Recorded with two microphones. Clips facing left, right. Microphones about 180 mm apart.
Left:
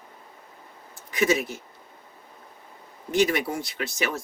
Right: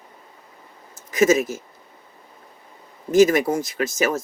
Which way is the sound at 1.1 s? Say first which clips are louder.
Right 6 dB; 45° right (ahead or behind).